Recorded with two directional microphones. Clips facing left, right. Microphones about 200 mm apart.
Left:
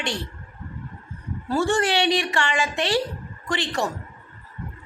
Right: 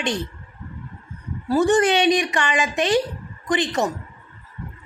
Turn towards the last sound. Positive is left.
turn(degrees=-20)  # may be behind; listen again after turning